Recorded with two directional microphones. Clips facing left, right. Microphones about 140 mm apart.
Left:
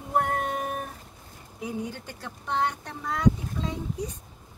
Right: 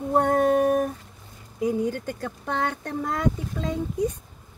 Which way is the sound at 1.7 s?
50° right (ahead or behind).